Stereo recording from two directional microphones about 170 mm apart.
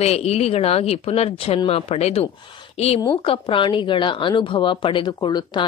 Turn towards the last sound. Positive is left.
turn(degrees=25)  # may be behind; listen again after turning